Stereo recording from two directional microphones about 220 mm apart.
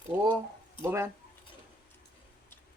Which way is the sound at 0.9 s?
10° right (ahead or behind).